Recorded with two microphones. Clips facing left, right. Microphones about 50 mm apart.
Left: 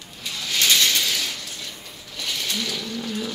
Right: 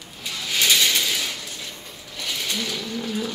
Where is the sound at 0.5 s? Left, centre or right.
Centre.